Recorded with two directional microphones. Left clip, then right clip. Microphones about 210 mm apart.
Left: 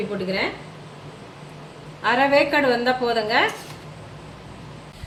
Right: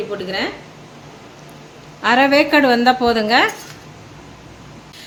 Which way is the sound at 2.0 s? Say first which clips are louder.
Right 4 dB; 40° right (ahead or behind).